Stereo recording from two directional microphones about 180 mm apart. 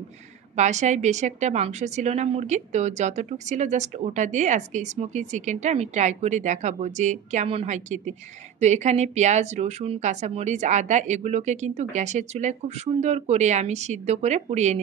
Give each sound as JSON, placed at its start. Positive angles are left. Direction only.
{"t": 0.6, "sound": "a woman's voice", "side_deg": -40}